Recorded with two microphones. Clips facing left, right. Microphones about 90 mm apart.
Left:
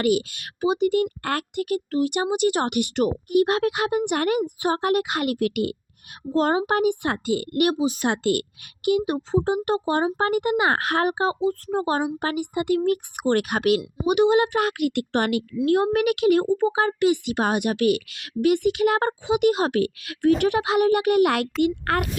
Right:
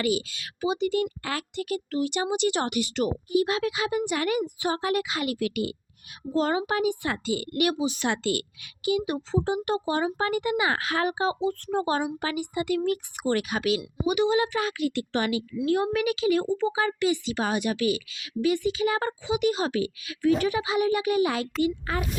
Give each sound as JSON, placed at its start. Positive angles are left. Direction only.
{"t": 0.0, "sound": "a woman's voice", "side_deg": 55}
{"t": 12.2, "sound": "speech", "side_deg": 50}